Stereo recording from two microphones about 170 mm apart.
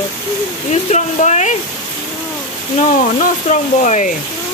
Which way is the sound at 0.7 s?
45° left (ahead or behind).